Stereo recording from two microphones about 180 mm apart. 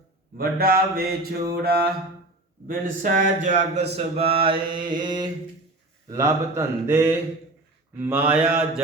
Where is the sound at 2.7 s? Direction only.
45° right (ahead or behind); by 5.2 s 25° right (ahead or behind).